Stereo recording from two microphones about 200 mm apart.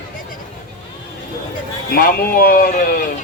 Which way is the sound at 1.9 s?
50° left (ahead or behind).